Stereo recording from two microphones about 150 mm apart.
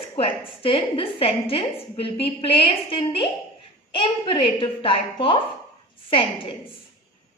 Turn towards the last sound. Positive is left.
turn(degrees=35)  # may be behind; listen again after turning